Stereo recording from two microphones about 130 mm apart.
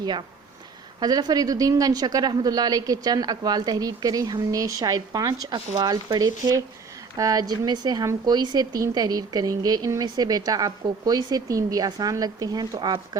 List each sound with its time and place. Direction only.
0.0 s a woman's voice: 35° right (ahead or behind)